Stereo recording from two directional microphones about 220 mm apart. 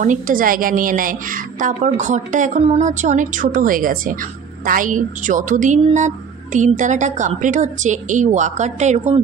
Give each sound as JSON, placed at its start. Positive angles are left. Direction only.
{"t": 0.0, "sound": "a woman's voice", "side_deg": -35}